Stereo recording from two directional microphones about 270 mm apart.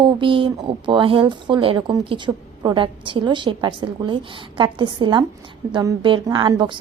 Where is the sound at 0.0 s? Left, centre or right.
Centre.